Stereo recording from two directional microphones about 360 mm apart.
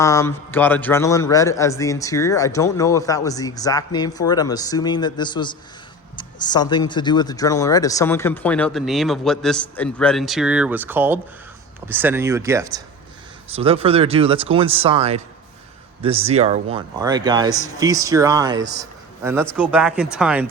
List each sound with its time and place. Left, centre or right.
0.0 s a man's voice: centre